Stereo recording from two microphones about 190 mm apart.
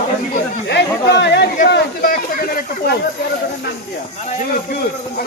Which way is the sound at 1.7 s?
50° left (ahead or behind).